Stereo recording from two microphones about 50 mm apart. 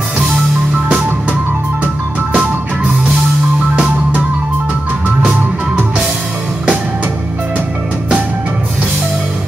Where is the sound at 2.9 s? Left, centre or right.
Centre.